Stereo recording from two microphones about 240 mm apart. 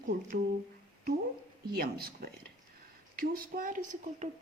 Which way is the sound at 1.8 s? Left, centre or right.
Right.